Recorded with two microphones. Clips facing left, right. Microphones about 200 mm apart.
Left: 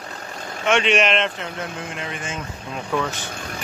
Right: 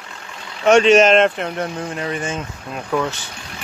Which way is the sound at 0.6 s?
40° right (ahead or behind).